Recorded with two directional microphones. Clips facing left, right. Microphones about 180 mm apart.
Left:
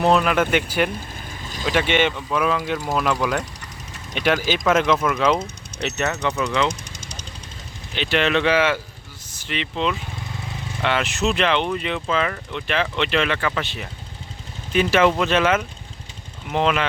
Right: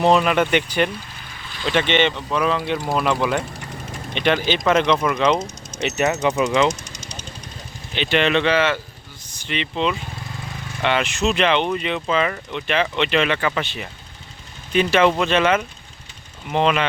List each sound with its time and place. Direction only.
0.0 s speech: centre (ahead or behind)
5.7 s a sound: 60° left (ahead or behind)
6.2 s speech: 15° right (ahead or behind)
6.9 s vehicle: 50° left (ahead or behind)
7.9 s speech: centre (ahead or behind)